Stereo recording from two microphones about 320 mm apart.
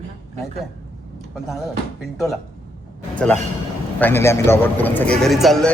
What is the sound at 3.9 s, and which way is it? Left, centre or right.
A man's voice, centre.